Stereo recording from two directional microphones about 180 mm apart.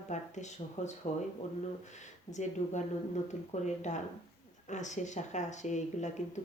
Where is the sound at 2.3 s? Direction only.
40° left (ahead or behind).